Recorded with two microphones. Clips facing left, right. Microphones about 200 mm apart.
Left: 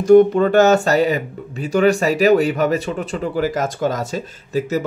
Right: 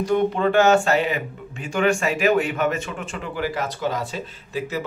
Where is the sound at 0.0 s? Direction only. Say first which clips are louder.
Left 9 dB; 45° left (ahead or behind).